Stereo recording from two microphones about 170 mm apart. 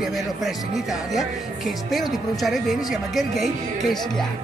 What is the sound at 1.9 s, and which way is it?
Speech, centre (ahead or behind).